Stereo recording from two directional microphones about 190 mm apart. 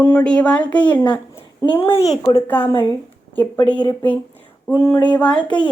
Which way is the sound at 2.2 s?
10° left (ahead or behind).